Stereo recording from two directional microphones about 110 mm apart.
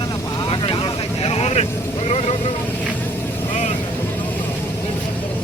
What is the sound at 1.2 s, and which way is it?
Vehicle, 65° left (ahead or behind).